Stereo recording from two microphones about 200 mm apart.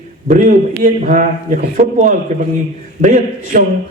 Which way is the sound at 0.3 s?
40° right (ahead or behind).